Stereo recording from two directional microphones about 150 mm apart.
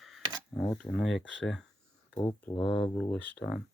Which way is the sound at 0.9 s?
Centre (ahead or behind).